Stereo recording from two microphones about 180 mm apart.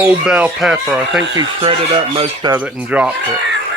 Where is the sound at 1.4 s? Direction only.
25° right (ahead or behind).